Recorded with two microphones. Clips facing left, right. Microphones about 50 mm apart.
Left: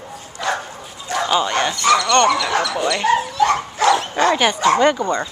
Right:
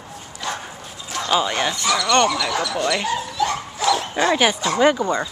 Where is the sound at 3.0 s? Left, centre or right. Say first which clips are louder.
Left 6 dB; left.